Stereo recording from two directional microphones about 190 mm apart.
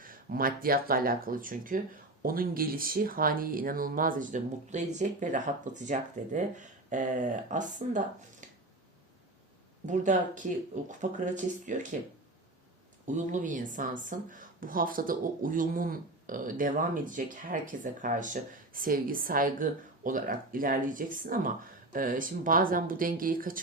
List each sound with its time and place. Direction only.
0.0 s speech: 50° right (ahead or behind)
9.8 s speech: 40° right (ahead or behind)
13.1 s speech: 40° right (ahead or behind)